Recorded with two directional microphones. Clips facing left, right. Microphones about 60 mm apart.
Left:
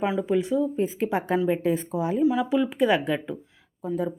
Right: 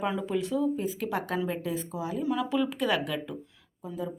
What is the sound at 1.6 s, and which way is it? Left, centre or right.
Speech, left.